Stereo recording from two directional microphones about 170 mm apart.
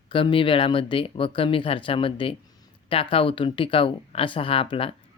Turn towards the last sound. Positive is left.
turn(degrees=30)  # may be behind; listen again after turning